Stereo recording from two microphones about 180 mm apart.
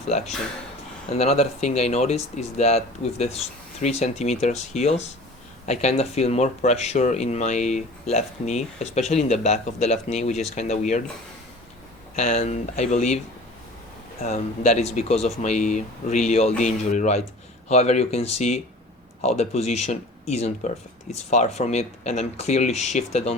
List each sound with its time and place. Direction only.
0.1 s speech: 40° left (ahead or behind)
12.1 s speech: 35° left (ahead or behind)
14.2 s speech: 35° left (ahead or behind)